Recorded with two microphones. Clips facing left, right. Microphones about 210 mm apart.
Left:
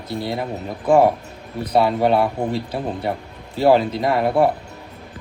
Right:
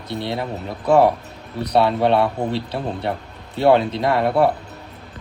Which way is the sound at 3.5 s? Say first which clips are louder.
Even; centre (ahead or behind).